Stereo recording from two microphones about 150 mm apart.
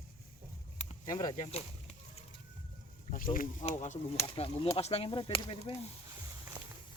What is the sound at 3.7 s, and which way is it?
Speech, 45° left (ahead or behind).